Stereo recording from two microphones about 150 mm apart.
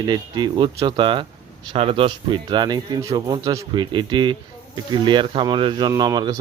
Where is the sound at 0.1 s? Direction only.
30° right (ahead or behind).